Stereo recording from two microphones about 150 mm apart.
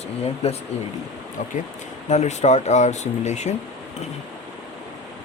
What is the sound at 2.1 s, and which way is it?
Speech, 50° left (ahead or behind).